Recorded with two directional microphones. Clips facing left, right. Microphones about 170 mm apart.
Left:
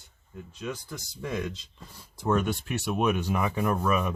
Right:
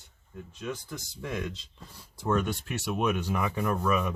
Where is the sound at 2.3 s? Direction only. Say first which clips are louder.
Left 2 dB; 55° left (ahead or behind).